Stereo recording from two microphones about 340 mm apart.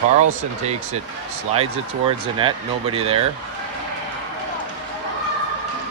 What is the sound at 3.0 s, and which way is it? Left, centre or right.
Speech, centre.